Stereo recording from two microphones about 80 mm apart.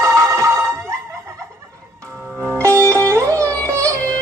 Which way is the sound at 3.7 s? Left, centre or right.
Right.